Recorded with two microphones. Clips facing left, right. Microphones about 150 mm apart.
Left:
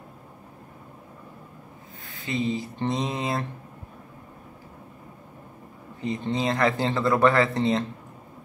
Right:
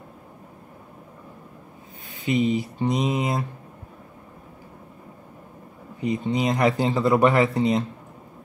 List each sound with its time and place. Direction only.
2.0 s speech: 20° right (ahead or behind)
5.9 s speech: 15° right (ahead or behind)